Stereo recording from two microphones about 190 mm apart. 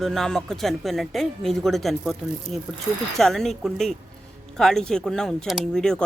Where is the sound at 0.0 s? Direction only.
Centre (ahead or behind).